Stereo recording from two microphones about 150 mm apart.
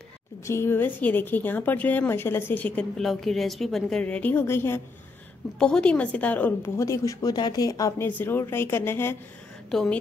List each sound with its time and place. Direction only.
0.5 s a woman's voice: 15° left (ahead or behind)
9.7 s a woman's voice: centre (ahead or behind)